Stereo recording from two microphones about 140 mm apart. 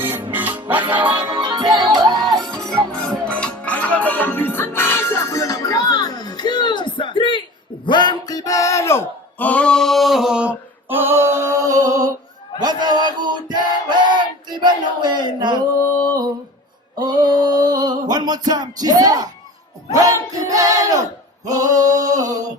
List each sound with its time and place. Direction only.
0.3 s music: 15° right (ahead or behind)
1.3 s music: 30° right (ahead or behind)
2.9 s music: 5° left (ahead or behind); by 7.4 s 35° left (ahead or behind)
7.9 s a sound: 30° left (ahead or behind); by 15.6 s 30° right (ahead or behind)
17.0 s music: 30° right (ahead or behind)
20.0 s a sound: 25° right (ahead or behind)